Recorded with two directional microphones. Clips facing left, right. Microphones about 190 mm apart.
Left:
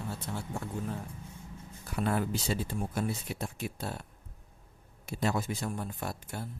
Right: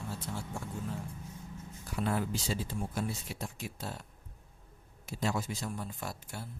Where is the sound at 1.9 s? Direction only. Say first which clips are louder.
Left 2 dB; 55° left (ahead or behind).